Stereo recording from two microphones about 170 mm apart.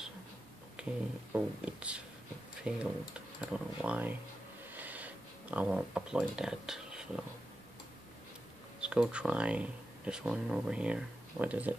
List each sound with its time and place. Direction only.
0.8 s a sound: 5° right (ahead or behind)
1.3 s speech: 5° right (ahead or behind)
8.8 s speech: 5° right (ahead or behind)